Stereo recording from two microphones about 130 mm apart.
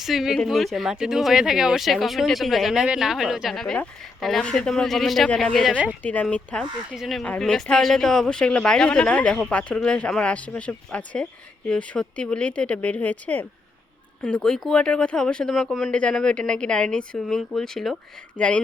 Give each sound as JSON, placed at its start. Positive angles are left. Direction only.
{"t": 0.0, "sound": "speech", "side_deg": -5}
{"t": 5.7, "sound": "speech", "side_deg": -10}
{"t": 6.0, "sound": "speech", "side_deg": 10}